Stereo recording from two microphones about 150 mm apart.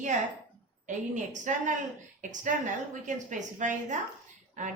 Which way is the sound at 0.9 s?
55° right (ahead or behind).